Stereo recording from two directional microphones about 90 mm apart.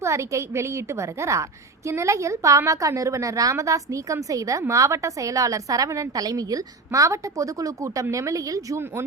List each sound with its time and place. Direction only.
0.0 s a woman's voice: 35° right (ahead or behind)